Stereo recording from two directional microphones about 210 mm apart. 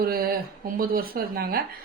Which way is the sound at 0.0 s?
45° right (ahead or behind).